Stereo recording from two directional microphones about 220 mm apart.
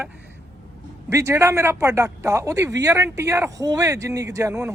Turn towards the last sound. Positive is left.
turn(degrees=-15)  # may be behind; listen again after turning